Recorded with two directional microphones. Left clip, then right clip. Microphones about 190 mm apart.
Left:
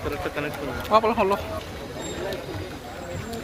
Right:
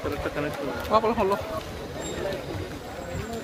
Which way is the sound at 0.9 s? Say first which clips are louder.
Left 3 dB; centre (ahead or behind).